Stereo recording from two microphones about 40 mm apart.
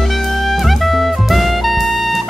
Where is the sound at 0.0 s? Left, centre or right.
Centre.